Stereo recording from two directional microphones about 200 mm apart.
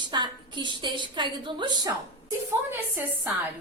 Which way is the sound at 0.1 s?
20° right (ahead or behind).